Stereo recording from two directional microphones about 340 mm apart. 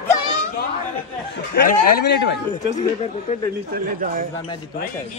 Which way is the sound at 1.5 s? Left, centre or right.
Left.